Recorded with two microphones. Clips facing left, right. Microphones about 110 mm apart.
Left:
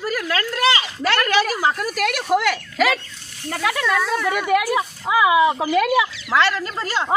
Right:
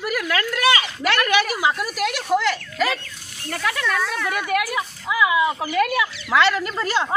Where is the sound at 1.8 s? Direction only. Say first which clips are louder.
Left 2 dB; 50° left (ahead or behind).